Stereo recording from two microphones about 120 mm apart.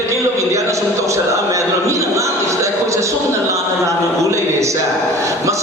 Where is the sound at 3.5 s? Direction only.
25° right (ahead or behind).